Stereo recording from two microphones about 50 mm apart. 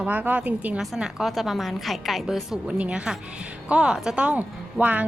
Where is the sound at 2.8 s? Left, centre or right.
Centre.